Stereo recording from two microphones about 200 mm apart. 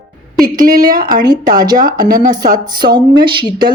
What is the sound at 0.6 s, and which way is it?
A woman's voice, 45° right (ahead or behind).